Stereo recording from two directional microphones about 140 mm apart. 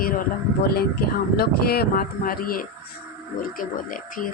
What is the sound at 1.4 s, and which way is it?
Speech, 90° left.